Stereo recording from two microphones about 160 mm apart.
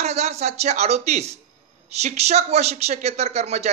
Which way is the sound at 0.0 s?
45° right (ahead or behind).